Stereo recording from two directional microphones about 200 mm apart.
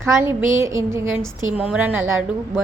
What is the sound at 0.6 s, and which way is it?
A woman's voice, 15° right (ahead or behind).